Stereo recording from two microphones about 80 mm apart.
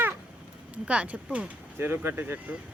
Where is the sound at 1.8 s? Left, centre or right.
Right.